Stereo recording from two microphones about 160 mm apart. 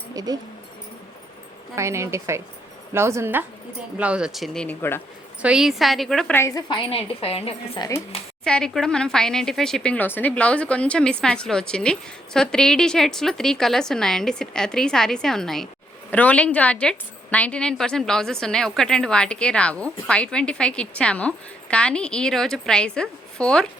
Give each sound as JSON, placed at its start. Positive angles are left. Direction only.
{"t": 1.7, "sound": "a woman's voice", "side_deg": -15}
{"t": 5.4, "sound": "speech", "side_deg": -5}
{"t": 6.3, "sound": "a woman's voice", "side_deg": 20}
{"t": 7.8, "sound": "speech", "side_deg": 20}
{"t": 8.4, "sound": "a woman's voice", "side_deg": 5}